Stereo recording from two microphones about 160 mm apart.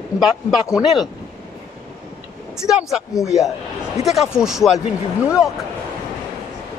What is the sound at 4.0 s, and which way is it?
Speech, 40° left (ahead or behind).